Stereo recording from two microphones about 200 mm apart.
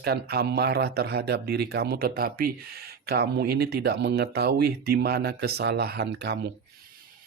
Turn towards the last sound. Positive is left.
turn(degrees=-60)  # may be behind; listen again after turning